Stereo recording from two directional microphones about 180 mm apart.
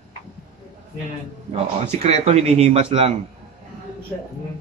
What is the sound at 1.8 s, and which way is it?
A man's voice, 35° right (ahead or behind).